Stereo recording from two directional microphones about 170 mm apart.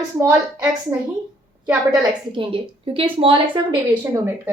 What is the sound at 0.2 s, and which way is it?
Speech, 15° right (ahead or behind).